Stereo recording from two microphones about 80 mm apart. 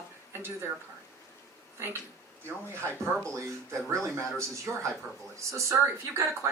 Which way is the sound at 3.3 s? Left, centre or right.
Right.